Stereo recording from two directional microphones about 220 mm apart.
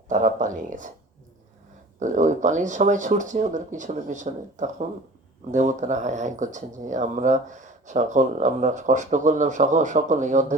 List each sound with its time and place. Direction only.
0.1 s speech: 35° right (ahead or behind)
2.0 s speech: 35° right (ahead or behind)